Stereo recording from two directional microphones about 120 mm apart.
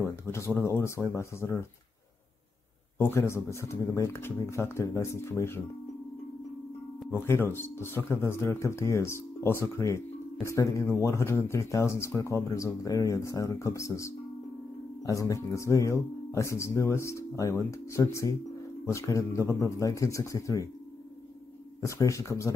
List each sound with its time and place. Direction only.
0.3 s speech: 20° left (ahead or behind)
3.0 s speech: 20° left (ahead or behind)
7.1 s speech: 20° left (ahead or behind)
21.8 s speech: 25° left (ahead or behind)